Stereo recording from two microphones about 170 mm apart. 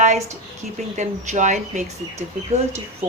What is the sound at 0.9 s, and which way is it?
Speech, 45° right (ahead or behind).